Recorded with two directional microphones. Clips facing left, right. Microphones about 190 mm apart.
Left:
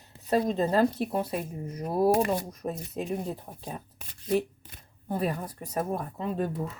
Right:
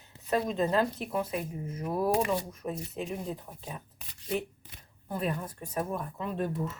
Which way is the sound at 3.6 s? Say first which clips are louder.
Left 3 dB; 40° left (ahead or behind).